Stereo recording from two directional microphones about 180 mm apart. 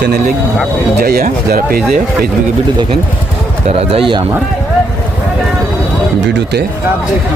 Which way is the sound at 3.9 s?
30° right (ahead or behind).